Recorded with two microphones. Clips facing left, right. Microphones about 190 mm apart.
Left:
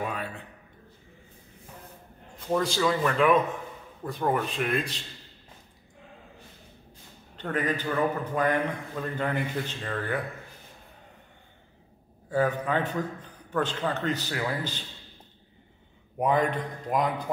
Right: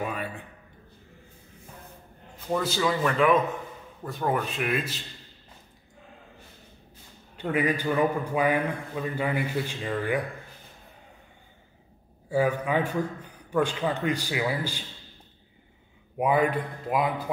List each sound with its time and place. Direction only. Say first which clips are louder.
0.0 s a sound: right 1 dB; 5° right (ahead or behind)
2.5 s speech: left 1 dB; 5° right (ahead or behind)
7.3 s a man's voice: right 3 dB; 10° right (ahead or behind)
12.3 s a man's voice: right 1 dB; 10° right (ahead or behind)
16.2 s a man's voice: right 1 dB; 10° right (ahead or behind)